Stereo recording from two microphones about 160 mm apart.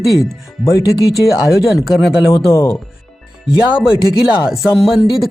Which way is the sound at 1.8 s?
Centre (ahead or behind).